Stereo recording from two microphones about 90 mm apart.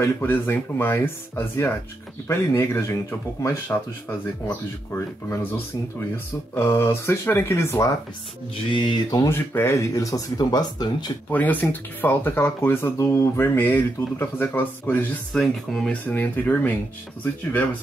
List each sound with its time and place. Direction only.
0.0 s speech: 25° left (ahead or behind)
4.9 s speech: 25° left (ahead or behind)
8.7 s mantra: 60° left (ahead or behind)
9.3 s speech: 25° left (ahead or behind); by 11.1 s 50° left (ahead or behind)
11.3 s speech: 20° left (ahead or behind)
15.3 s speech: 5° left (ahead or behind)
15.9 s speech: 20° left (ahead or behind)